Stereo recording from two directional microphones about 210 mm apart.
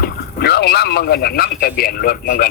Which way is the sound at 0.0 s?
50° left (ahead or behind).